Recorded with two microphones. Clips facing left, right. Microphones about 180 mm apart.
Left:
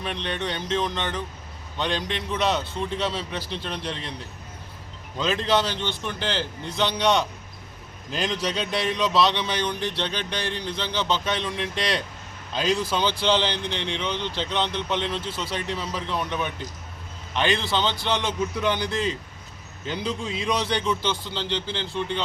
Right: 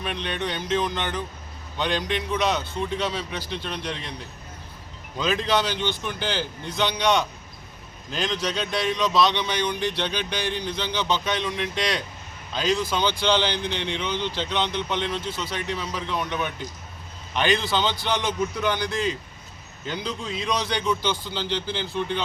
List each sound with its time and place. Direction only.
0.0 s speech: 5° right (ahead or behind)
5.1 s speech: centre (ahead or behind)
12.5 s speech: 5° left (ahead or behind)
15.2 s a man's voice: 30° left (ahead or behind)
15.9 s speech: 5° left (ahead or behind)
19.9 s speech: 5° left (ahead or behind)